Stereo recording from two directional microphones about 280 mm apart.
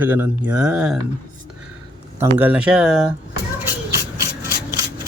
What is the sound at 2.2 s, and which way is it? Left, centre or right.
Speech, centre.